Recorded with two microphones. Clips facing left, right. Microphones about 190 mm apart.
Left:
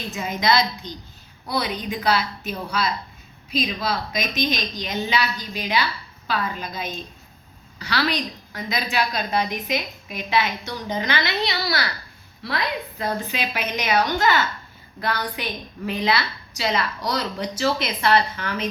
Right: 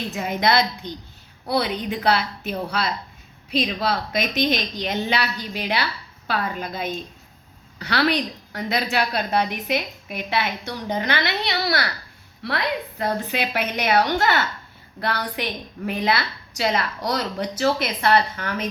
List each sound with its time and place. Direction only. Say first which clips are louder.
0.1 s a woman's voice: even; 60° right (ahead or behind)
15.9 s a woman's voice: even; 50° right (ahead or behind)